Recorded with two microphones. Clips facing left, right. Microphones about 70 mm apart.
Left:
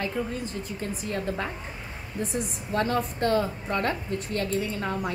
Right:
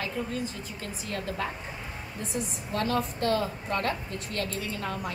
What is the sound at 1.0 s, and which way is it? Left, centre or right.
Speech, left.